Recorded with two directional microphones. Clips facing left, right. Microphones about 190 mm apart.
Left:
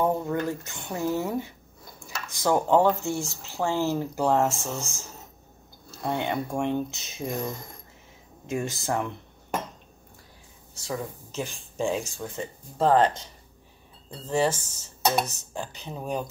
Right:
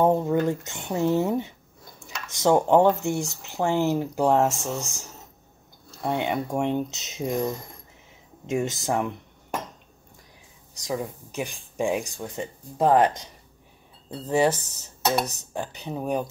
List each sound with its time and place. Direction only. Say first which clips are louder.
0.0 s speech: right 5 dB; 20° right (ahead or behind)
10.7 s speech: right 3 dB; 15° right (ahead or behind)